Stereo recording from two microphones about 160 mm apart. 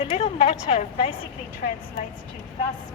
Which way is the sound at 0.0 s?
40° left (ahead or behind).